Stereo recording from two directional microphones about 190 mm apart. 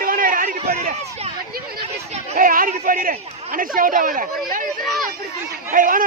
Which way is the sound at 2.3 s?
45° right (ahead or behind).